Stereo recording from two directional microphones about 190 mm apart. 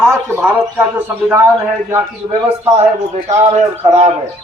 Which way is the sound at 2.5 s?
35° right (ahead or behind).